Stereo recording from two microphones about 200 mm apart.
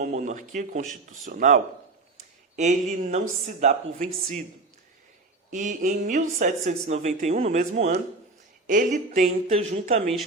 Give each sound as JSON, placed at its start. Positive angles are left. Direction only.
{"t": 0.0, "sound": "speech", "side_deg": -40}
{"t": 5.5, "sound": "speech", "side_deg": -40}